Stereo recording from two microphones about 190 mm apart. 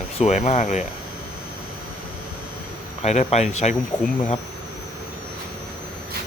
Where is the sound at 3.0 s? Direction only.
35° left (ahead or behind).